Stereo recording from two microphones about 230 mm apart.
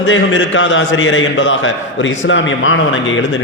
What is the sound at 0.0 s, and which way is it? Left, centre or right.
A man's voice, left.